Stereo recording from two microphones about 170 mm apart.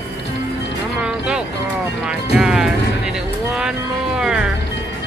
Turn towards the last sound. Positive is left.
turn(degrees=-5)  # may be behind; listen again after turning